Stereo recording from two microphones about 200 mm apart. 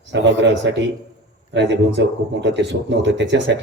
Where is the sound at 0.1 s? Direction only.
60° right (ahead or behind).